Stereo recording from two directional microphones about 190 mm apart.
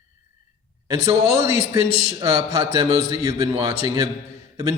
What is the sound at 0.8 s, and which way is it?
A man's voice, 15° right (ahead or behind).